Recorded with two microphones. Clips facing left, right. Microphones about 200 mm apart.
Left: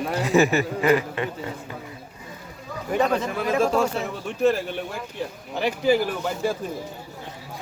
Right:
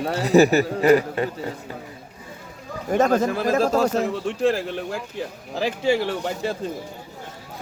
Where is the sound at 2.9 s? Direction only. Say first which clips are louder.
Right 4 dB; 45° right (ahead or behind).